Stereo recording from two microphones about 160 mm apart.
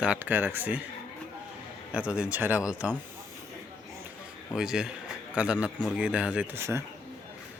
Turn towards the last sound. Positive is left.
turn(degrees=-15)  # may be behind; listen again after turning